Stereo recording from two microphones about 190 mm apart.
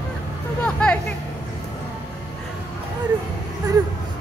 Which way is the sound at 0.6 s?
5° left (ahead or behind).